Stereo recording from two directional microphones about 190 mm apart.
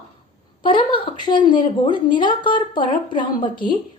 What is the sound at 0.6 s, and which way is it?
A woman's voice, 25° left (ahead or behind).